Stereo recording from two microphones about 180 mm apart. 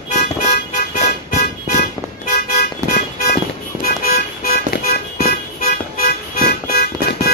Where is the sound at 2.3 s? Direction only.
55° left (ahead or behind).